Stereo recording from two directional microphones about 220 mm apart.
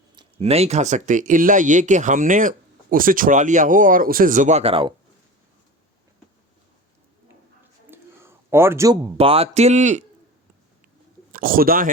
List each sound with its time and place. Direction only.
0.2 s speech: 25° right (ahead or behind)
7.9 s a sound: 10° right (ahead or behind)
9.1 s speech: 25° right (ahead or behind)
11.3 s speech: 40° right (ahead or behind)